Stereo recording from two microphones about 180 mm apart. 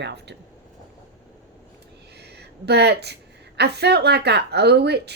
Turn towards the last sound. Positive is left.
turn(degrees=-65)  # may be behind; listen again after turning